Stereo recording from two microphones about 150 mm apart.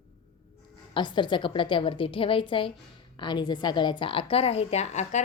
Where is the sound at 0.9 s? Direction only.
30° left (ahead or behind).